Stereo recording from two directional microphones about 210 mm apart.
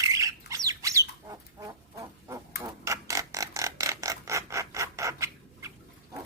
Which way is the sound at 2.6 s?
15° right (ahead or behind).